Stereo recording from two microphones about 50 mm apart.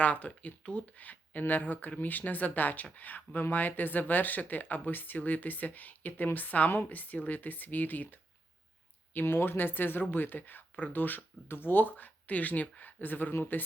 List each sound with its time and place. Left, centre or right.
0.0 s speech: left
9.2 s speech: left